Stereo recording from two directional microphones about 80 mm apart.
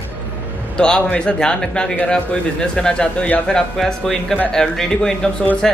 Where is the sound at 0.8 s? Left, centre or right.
Centre.